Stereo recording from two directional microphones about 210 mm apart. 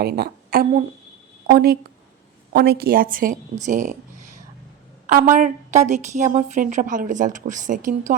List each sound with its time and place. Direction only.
0.0 s a woman's voice: 50° right (ahead or behind)